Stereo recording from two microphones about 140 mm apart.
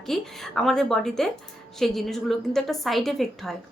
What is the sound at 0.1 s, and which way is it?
A woman's voice, centre (ahead or behind).